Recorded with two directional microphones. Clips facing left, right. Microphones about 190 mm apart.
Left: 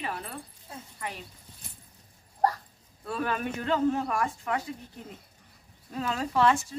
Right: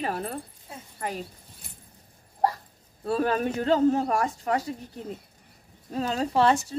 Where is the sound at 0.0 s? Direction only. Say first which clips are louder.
Right 6 dB; 45° right (ahead or behind).